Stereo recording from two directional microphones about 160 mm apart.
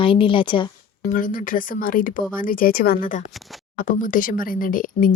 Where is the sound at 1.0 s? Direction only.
55° left (ahead or behind).